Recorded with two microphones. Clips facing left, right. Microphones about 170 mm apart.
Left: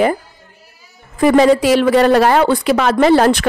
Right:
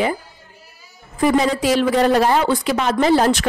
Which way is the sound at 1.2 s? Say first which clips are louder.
Left 6 dB; 70° left (ahead or behind).